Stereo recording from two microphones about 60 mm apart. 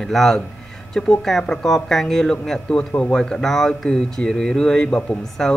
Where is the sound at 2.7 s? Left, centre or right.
Centre.